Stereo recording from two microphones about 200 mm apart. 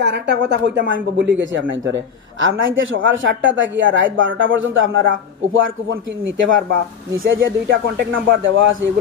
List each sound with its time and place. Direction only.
0.0 s a man's voice: 55° right (ahead or behind)
7.3 s a man's voice: 55° right (ahead or behind); by 8.9 s 70° right (ahead or behind)